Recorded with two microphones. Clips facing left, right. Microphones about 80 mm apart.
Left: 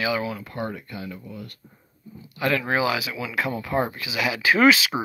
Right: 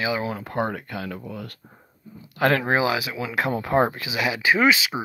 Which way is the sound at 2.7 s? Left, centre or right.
Right.